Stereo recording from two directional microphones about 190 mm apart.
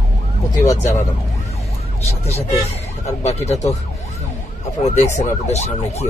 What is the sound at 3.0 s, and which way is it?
Speech, 35° left (ahead or behind).